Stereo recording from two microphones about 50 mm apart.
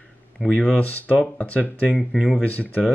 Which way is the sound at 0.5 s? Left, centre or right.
Left.